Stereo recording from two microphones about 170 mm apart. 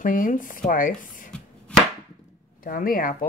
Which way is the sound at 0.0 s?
55° left (ahead or behind).